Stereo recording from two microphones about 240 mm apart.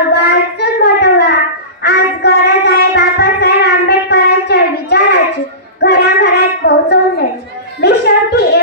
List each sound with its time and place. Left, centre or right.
0.1 s child singing: left
1.8 s a sound: left
7.8 s music: left